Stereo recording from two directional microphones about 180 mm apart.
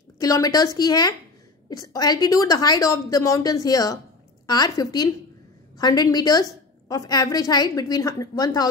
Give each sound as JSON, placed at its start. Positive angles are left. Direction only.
{"t": 0.2, "sound": "a woman's voice", "side_deg": 20}